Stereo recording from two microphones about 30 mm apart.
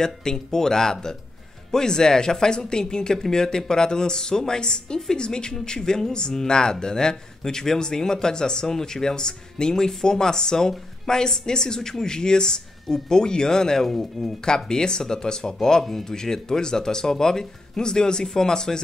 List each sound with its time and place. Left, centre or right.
0.0 s speech: left
14.4 s speech: left